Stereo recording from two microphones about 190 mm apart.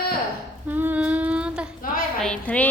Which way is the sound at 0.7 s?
10° right (ahead or behind).